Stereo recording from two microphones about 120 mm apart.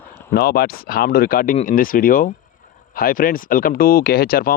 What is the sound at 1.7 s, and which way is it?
Speech, 60° left (ahead or behind).